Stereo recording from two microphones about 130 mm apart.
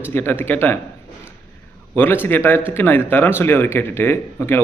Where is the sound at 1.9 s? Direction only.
15° left (ahead or behind).